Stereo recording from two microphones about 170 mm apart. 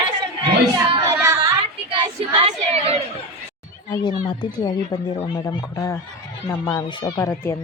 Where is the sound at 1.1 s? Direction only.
20° right (ahead or behind).